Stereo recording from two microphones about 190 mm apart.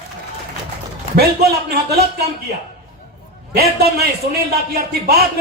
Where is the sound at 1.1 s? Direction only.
60° right (ahead or behind).